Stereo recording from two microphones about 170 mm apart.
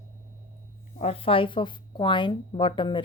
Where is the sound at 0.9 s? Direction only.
35° left (ahead or behind).